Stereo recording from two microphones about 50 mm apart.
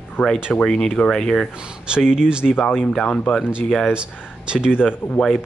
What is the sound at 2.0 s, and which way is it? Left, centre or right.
Speech, centre.